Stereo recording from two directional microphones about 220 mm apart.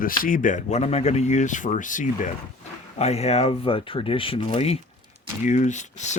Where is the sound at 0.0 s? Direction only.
40° left (ahead or behind).